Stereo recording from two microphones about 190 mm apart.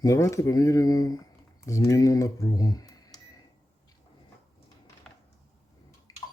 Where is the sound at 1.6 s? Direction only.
15° left (ahead or behind).